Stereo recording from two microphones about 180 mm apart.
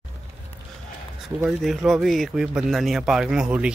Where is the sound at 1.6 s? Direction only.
Centre (ahead or behind).